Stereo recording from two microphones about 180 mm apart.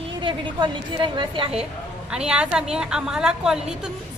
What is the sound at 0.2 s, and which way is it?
A woman's voice, 25° right (ahead or behind).